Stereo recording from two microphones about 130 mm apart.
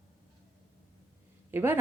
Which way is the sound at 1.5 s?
15° right (ahead or behind).